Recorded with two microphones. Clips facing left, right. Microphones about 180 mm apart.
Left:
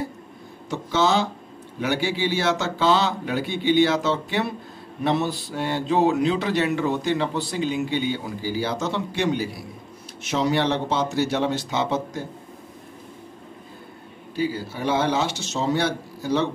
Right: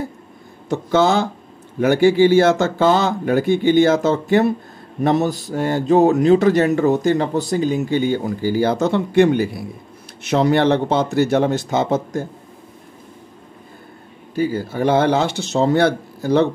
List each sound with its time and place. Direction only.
0.7 s a man's voice: 50° right (ahead or behind)
14.3 s a man's voice: 50° right (ahead or behind)